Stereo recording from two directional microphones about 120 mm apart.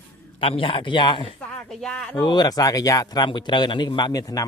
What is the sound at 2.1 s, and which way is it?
Speech, 35° left (ahead or behind).